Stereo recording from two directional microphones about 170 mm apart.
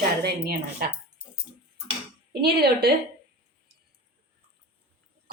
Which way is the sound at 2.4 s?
65° right (ahead or behind).